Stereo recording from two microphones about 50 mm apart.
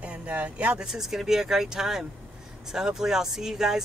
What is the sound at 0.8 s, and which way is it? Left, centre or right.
Speech, centre.